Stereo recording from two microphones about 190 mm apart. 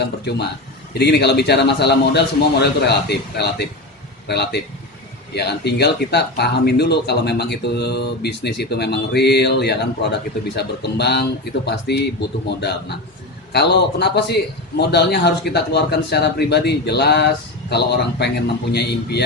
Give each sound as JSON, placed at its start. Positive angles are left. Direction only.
{"t": 0.9, "sound": "speech", "side_deg": 60}